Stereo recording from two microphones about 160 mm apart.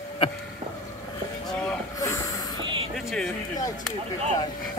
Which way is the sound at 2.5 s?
30° right (ahead or behind).